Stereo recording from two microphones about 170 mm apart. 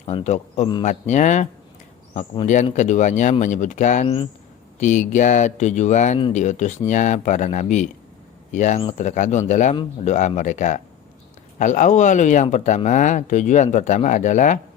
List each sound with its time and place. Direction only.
0.0 s a man's voice: 40° left (ahead or behind)
2.7 s speech: 45° left (ahead or behind)